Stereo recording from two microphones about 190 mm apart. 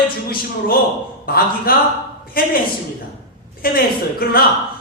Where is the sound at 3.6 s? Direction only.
50° left (ahead or behind).